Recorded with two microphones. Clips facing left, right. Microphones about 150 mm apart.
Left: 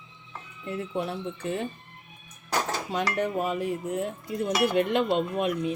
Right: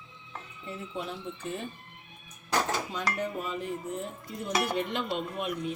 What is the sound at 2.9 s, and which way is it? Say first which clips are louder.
Dishes: left 5 dB; 90° left.